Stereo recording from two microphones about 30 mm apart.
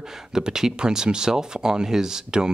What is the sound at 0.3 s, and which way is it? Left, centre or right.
Speech, centre.